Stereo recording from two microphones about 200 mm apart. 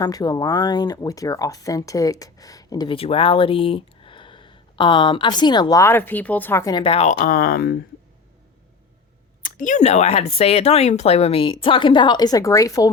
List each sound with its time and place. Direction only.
0.0 s speech: 20° left (ahead or behind); by 7.8 s 50° left (ahead or behind)
9.4 s speech: 40° left (ahead or behind); by 12.9 s 15° left (ahead or behind)